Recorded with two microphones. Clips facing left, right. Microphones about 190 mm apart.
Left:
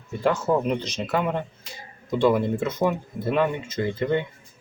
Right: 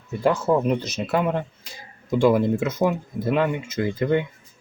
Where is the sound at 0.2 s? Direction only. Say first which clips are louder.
Right 2 dB; 10° right (ahead or behind).